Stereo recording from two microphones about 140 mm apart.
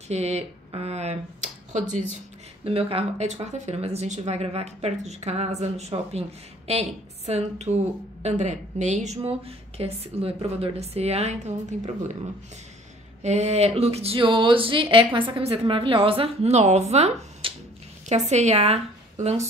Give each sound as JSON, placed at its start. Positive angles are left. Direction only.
{"t": 0.1, "sound": "speech", "side_deg": -50}
{"t": 1.7, "sound": "speech", "side_deg": -60}
{"t": 2.6, "sound": "speech", "side_deg": -40}
{"t": 13.2, "sound": "a woman's voice", "side_deg": -50}